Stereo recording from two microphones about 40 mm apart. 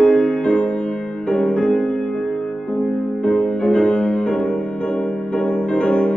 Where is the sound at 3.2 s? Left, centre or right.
Left.